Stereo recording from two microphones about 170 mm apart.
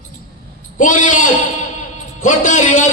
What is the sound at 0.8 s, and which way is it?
A man's voice, 50° left (ahead or behind).